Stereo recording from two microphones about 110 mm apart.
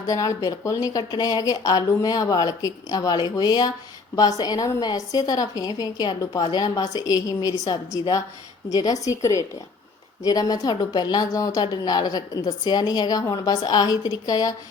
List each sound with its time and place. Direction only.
0.0 s a woman's voice: 30° left (ahead or behind)